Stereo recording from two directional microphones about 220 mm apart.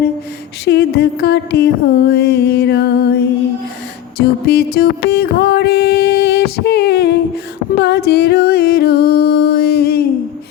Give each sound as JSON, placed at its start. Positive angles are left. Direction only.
{"t": 0.6, "sound": "music", "side_deg": 50}
{"t": 4.2, "sound": "music", "side_deg": 45}